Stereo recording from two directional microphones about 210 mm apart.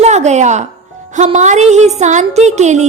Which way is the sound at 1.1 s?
35° right (ahead or behind).